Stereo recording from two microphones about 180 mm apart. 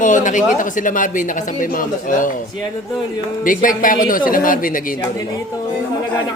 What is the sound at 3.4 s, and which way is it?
Speech, 50° left (ahead or behind).